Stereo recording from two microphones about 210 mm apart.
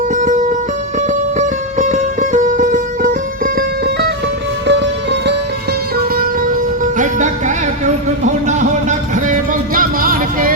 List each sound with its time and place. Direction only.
0.2 s music: 40° right (ahead or behind)
4.6 s music: 55° right (ahead or behind)
7.0 s music: 35° right (ahead or behind)